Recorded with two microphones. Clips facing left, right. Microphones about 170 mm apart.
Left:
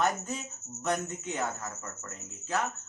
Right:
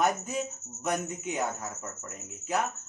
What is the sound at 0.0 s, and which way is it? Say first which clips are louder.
Speech: right 2 dB; 10° right (ahead or behind).